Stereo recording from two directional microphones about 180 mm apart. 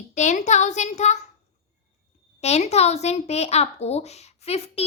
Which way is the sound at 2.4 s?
35° left (ahead or behind).